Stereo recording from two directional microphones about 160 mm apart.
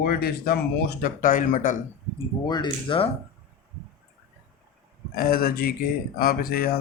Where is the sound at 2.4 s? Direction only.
30° left (ahead or behind).